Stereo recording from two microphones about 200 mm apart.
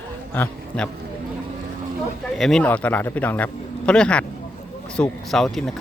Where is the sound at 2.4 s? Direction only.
5° left (ahead or behind).